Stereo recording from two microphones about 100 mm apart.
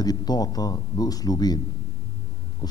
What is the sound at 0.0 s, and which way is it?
A man's voice, 40° left (ahead or behind).